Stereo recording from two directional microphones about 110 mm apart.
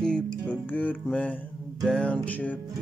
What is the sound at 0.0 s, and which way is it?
Music, 10° left (ahead or behind).